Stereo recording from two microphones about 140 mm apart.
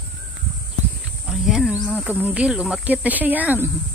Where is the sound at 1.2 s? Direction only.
5° right (ahead or behind).